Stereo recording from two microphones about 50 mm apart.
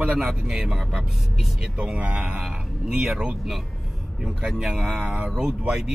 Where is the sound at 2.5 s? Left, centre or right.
Centre.